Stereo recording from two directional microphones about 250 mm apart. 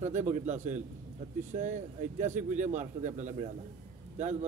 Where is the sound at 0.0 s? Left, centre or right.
Right.